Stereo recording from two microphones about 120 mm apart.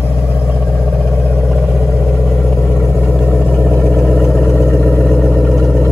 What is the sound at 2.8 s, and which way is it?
Vehicle, centre (ahead or behind).